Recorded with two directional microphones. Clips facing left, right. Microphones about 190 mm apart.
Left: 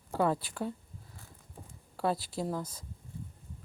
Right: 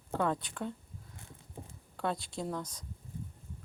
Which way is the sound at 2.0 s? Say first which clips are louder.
Left 3 dB; 5° left (ahead or behind).